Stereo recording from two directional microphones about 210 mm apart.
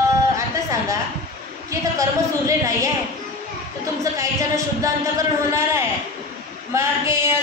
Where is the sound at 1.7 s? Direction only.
15° right (ahead or behind).